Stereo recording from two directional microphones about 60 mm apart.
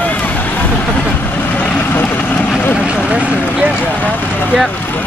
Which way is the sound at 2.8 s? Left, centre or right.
Centre.